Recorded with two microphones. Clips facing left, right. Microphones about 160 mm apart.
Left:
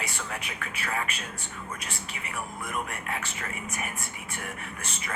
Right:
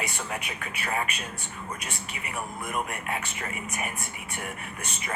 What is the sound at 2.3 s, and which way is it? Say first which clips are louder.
Speech: right 2 dB; 20° right (ahead or behind).